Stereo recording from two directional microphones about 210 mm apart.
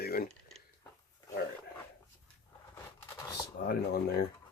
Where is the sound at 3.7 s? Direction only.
45° left (ahead or behind).